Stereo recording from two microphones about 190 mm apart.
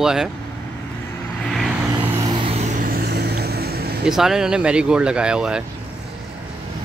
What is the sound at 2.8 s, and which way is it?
Vehicle, 55° right (ahead or behind).